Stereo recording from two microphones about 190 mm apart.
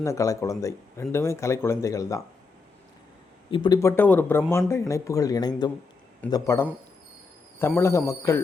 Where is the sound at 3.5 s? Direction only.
25° left (ahead or behind).